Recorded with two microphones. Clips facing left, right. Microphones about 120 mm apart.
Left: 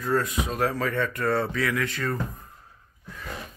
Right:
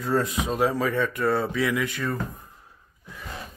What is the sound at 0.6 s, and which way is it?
Speech, 15° right (ahead or behind).